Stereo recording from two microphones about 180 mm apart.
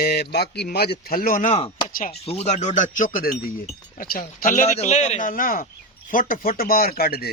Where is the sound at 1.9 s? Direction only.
50° left (ahead or behind).